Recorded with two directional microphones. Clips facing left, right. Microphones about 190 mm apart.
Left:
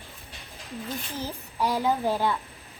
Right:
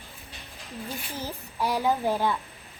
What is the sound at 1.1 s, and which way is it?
Speech, 10° right (ahead or behind).